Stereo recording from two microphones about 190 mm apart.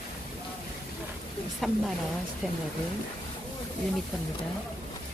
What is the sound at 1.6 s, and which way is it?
Speech, centre (ahead or behind).